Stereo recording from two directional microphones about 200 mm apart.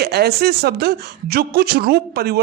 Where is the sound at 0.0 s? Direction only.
50° right (ahead or behind).